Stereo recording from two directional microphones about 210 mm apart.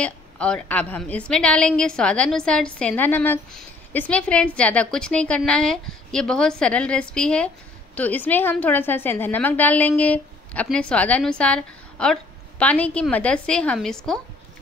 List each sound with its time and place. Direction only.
0.0 s a woman's voice: 5° left (ahead or behind)